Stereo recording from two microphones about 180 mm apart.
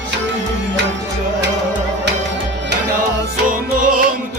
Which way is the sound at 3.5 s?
50° right (ahead or behind).